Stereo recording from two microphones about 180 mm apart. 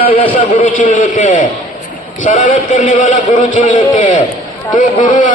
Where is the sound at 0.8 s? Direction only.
45° left (ahead or behind).